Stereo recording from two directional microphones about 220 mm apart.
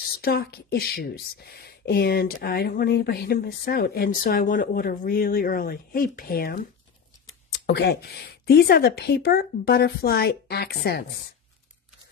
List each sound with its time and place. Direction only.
0.0 s speech: 45° left (ahead or behind)
7.6 s speech: 45° left (ahead or behind)